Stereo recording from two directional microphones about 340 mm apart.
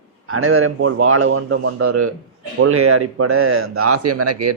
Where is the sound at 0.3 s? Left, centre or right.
Right.